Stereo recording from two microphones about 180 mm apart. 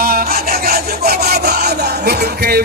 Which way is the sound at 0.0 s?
55° right (ahead or behind).